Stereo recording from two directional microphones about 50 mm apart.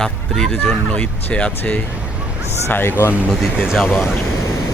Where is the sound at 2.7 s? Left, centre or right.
Left.